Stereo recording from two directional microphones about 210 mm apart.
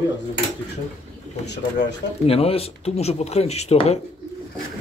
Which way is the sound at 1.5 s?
55° left (ahead or behind).